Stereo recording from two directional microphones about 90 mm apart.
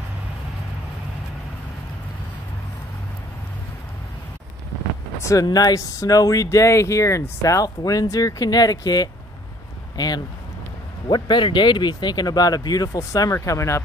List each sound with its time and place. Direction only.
5.2 s speech: 40° left (ahead or behind)